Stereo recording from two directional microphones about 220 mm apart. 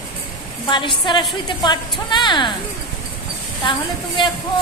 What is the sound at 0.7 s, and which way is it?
A woman's voice, 20° left (ahead or behind).